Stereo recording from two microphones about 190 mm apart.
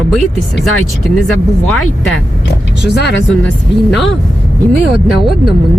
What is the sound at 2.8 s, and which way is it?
Speech, 65° left (ahead or behind).